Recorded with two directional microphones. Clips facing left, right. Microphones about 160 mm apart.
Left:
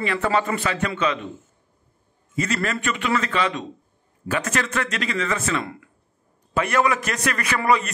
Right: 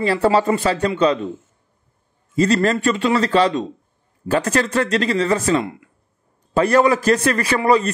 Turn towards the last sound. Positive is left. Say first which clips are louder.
# right 5 dB
turn(degrees=-30)  # may be behind; listen again after turning